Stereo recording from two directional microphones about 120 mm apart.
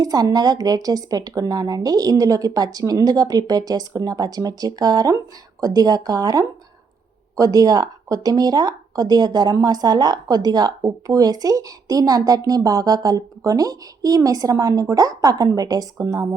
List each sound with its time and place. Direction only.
0.0 s speech: 30° right (ahead or behind)